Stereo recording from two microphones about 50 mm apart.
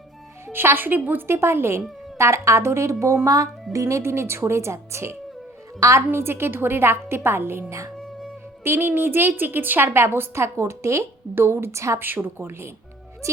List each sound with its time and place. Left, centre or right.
0.4 s a woman's voice: right
0.9 s a woman's voice: right
1.3 s speech: right
2.1 s a woman's voice: right
6.1 s a woman's voice: right
11.3 s a woman's voice: right
11.9 s a woman's voice: right
13.2 s music: right